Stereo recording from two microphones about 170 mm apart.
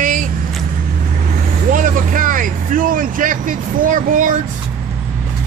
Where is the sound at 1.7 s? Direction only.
50° right (ahead or behind).